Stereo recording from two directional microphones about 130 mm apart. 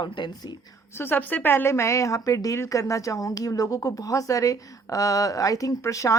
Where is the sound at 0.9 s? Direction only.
15° left (ahead or behind).